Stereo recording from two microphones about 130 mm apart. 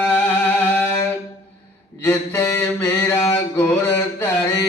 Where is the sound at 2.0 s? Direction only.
15° left (ahead or behind).